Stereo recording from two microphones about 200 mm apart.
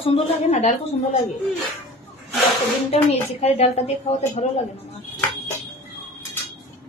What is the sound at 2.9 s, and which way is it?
A woman's voice, 30° left (ahead or behind).